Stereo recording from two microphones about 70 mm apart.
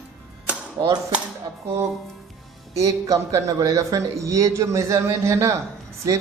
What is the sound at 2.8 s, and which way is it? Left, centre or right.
A man's voice, right.